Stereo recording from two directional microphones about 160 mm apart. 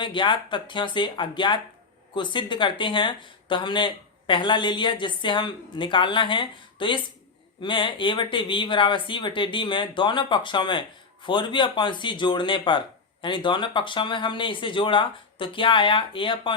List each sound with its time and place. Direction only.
0.0 s speech: 30° left (ahead or behind)